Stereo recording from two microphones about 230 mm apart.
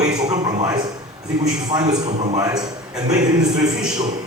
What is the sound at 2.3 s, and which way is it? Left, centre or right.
Speech, centre.